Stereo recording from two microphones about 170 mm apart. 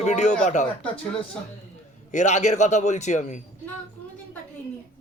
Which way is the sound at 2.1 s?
45° left (ahead or behind).